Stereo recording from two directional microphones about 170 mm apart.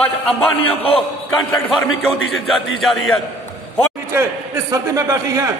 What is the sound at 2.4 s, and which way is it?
Speech, centre (ahead or behind).